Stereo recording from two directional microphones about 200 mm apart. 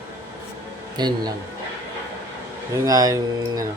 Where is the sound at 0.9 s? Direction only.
20° right (ahead or behind).